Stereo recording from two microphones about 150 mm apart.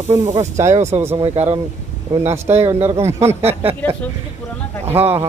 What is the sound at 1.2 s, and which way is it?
Speech, 35° right (ahead or behind).